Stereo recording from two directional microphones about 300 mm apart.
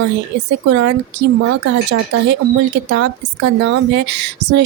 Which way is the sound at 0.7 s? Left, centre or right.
Right.